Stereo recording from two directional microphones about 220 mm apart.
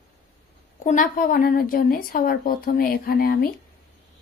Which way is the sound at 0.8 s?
40° left (ahead or behind).